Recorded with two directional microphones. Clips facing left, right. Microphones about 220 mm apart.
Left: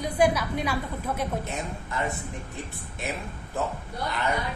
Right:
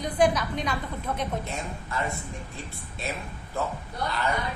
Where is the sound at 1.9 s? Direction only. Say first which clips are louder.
Left 1 dB; 20° left (ahead or behind).